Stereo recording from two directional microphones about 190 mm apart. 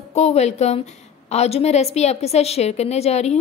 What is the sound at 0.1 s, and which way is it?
A woman's voice, 35° left (ahead or behind).